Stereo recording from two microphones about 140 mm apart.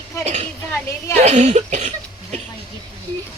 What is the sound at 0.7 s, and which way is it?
Speech, 15° left (ahead or behind).